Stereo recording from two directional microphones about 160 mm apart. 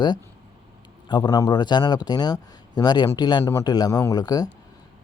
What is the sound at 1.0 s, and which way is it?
A man's voice, 25° left (ahead or behind).